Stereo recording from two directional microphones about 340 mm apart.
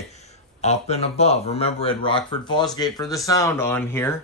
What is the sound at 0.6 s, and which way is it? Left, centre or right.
Speech, centre.